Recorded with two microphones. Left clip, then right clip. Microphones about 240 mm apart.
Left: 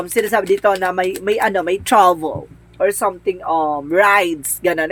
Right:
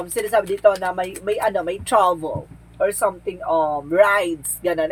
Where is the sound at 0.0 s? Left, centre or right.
Left.